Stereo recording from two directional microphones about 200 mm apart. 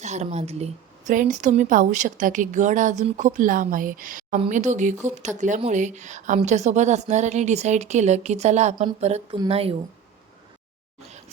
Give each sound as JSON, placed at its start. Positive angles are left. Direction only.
{"t": 0.0, "sound": "speech", "side_deg": -35}